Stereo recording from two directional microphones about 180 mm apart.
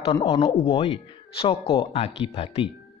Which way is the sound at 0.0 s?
35° left (ahead or behind).